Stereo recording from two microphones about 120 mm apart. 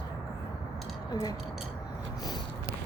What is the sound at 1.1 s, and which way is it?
Speech, 30° left (ahead or behind).